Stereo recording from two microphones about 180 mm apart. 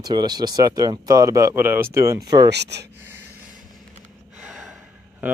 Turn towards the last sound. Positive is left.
turn(degrees=0)  # may be behind; listen again after turning